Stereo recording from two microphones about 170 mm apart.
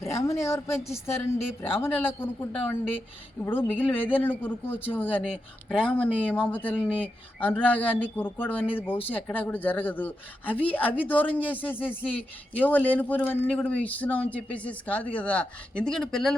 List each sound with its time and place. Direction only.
0.0 s a woman's voice: 20° left (ahead or behind); by 16.3 s 5° left (ahead or behind)